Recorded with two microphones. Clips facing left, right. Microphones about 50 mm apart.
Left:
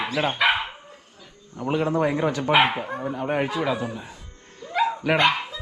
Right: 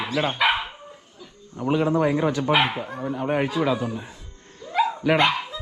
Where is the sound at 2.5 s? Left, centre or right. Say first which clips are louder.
Left 2 dB; centre.